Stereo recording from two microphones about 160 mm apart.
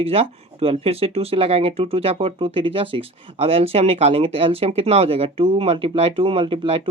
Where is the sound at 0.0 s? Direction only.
35° right (ahead or behind).